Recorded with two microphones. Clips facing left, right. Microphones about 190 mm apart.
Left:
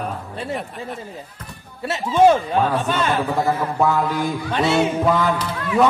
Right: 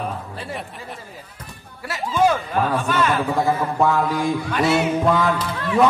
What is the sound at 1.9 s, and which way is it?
Speech, 25° left (ahead or behind).